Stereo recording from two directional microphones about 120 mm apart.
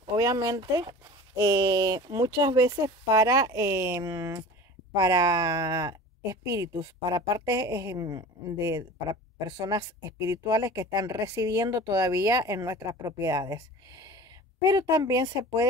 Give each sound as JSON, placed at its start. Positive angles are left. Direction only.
{"t": 0.0, "sound": "speech", "side_deg": -35}